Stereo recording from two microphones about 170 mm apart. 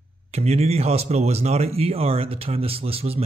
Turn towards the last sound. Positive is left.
turn(degrees=-35)  # may be behind; listen again after turning